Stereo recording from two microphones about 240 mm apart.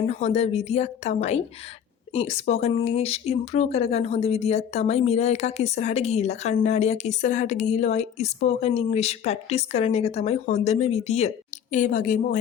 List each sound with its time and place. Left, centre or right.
0.1 s a woman's voice: left